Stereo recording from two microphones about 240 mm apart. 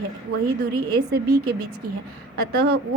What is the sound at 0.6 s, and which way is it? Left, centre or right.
Speech, right.